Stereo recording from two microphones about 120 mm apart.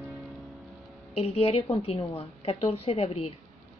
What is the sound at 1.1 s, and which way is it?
A woman's voice, 60° left (ahead or behind).